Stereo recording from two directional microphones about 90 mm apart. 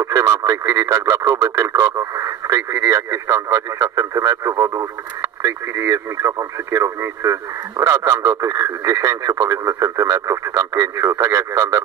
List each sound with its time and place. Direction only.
0.0 s speech: 35° right (ahead or behind)